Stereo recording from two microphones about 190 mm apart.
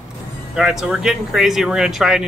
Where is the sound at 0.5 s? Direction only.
Centre (ahead or behind).